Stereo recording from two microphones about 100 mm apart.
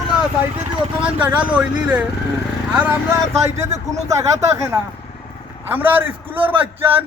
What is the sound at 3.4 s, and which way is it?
Speech, 30° right (ahead or behind).